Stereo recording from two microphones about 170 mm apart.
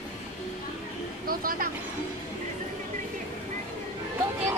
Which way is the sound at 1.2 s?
60° right (ahead or behind).